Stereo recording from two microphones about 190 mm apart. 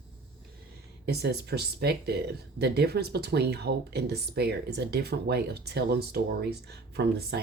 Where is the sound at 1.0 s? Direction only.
60° right (ahead or behind).